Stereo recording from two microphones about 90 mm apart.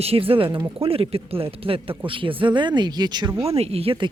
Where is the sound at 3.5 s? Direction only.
90° right.